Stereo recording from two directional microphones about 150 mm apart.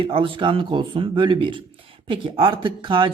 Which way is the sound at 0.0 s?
35° right (ahead or behind).